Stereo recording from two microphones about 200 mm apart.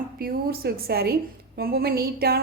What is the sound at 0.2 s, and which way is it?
A woman's voice, 50° right (ahead or behind).